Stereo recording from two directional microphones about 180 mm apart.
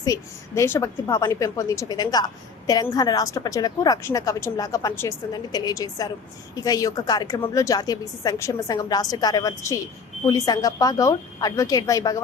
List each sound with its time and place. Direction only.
0.0 s a woman's voice: 20° left (ahead or behind)